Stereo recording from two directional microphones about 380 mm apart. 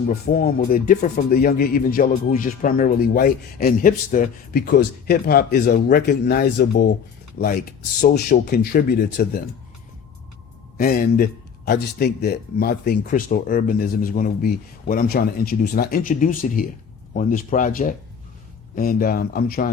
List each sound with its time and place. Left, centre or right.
0.1 s speech: left
10.8 s speech: left